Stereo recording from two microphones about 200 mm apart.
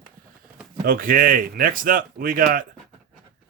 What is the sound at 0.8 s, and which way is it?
Speech, 45° right (ahead or behind).